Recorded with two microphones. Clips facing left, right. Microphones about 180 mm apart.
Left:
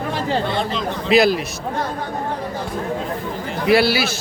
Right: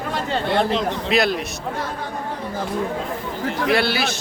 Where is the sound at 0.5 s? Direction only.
60° right (ahead or behind).